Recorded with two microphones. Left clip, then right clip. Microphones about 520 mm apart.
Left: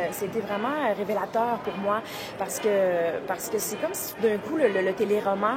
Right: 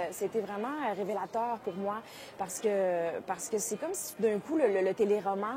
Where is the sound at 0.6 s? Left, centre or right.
Right.